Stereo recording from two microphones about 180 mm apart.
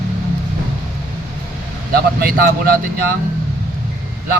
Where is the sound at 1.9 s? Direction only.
55° right (ahead or behind).